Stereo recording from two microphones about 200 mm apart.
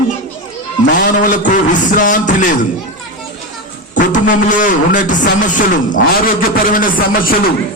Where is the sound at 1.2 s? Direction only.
40° left (ahead or behind).